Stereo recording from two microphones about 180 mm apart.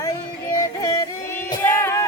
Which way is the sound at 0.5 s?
20° left (ahead or behind).